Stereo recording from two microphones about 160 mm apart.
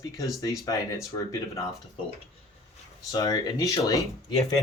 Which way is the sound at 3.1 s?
20° left (ahead or behind).